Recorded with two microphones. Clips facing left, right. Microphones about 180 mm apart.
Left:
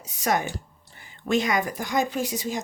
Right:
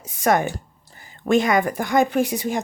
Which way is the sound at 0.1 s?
55° right (ahead or behind).